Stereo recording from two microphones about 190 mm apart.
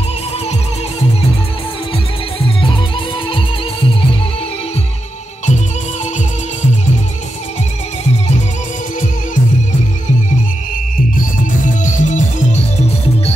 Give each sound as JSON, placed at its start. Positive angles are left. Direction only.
{"t": 9.3, "sound": "music", "side_deg": 40}
{"t": 11.1, "sound": "music", "side_deg": 40}